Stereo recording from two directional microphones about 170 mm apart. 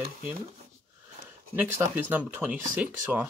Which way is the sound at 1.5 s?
10° right (ahead or behind).